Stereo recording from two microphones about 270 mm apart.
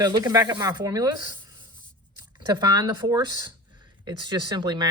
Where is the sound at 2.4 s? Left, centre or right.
Centre.